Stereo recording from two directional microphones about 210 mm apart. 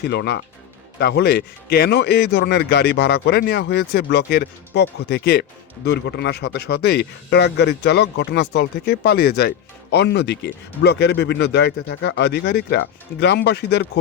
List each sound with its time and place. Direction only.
0.0 s a man's voice: 55° left (ahead or behind)